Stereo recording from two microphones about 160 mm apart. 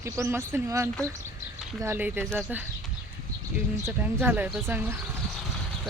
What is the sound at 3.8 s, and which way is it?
Speech, 15° right (ahead or behind).